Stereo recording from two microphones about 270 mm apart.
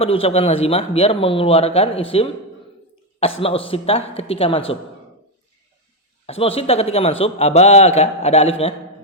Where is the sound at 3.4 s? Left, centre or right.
Left.